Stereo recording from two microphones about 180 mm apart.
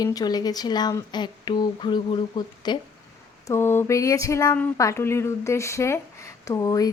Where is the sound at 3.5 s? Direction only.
10° left (ahead or behind).